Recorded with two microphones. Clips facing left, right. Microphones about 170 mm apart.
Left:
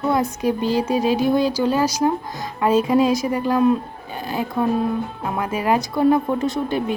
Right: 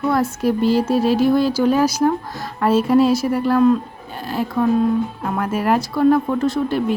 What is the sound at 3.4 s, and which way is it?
Speech, 15° left (ahead or behind).